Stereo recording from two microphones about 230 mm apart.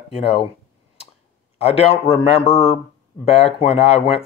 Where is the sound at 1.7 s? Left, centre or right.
Left.